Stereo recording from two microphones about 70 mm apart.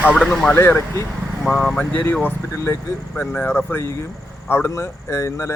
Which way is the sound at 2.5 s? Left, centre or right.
Left.